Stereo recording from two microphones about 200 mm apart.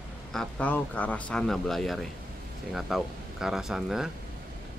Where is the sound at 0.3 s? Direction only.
5° left (ahead or behind).